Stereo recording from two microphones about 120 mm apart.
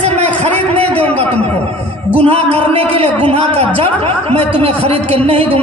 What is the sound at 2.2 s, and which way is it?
Speech, 55° right (ahead or behind).